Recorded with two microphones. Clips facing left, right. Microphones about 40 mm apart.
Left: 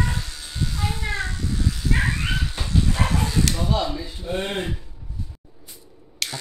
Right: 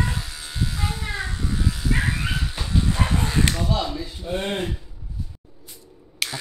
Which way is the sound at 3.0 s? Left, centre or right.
Right.